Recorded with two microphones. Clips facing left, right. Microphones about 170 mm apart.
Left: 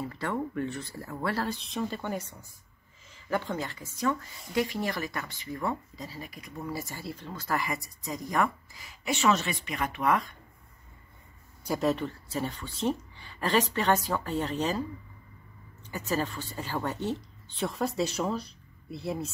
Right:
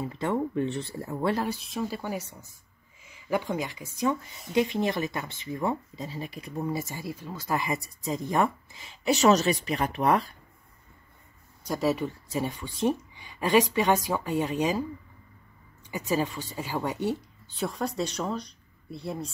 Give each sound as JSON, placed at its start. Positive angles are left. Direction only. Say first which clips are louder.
{"t": 0.0, "sound": "speech", "louder": "right 4 dB", "side_deg": -20}
{"t": 1.6, "sound": "speech", "louder": "right 1 dB", "side_deg": -5}
{"t": 11.6, "sound": "speech", "louder": "right 1 dB", "side_deg": 0}
{"t": 15.9, "sound": "speech", "louder": "right 3 dB", "side_deg": -15}
{"t": 17.6, "sound": "speech", "louder": "even", "side_deg": 0}